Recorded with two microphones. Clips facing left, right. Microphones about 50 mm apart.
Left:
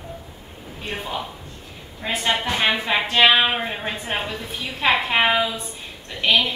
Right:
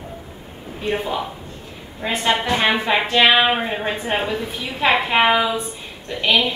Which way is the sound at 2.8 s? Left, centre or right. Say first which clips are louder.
Right 3 dB; centre.